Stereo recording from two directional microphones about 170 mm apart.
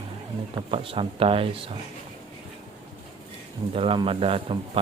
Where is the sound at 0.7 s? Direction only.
30° right (ahead or behind).